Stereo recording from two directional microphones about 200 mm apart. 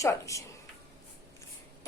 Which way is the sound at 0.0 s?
15° left (ahead or behind).